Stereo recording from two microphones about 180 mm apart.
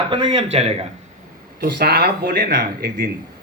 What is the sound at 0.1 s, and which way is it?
Speech, 25° right (ahead or behind).